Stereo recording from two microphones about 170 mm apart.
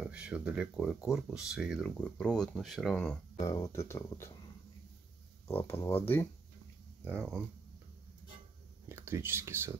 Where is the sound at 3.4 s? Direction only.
20° left (ahead or behind).